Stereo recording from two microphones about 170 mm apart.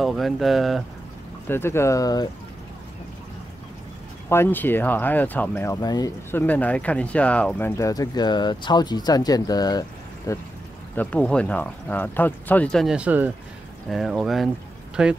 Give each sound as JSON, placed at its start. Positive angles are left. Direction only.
{"t": 0.0, "sound": "speech", "side_deg": 0}
{"t": 1.5, "sound": "speech", "side_deg": 15}
{"t": 4.3, "sound": "speech", "side_deg": 15}
{"t": 6.4, "sound": "speech", "side_deg": 10}
{"t": 11.0, "sound": "speech", "side_deg": 5}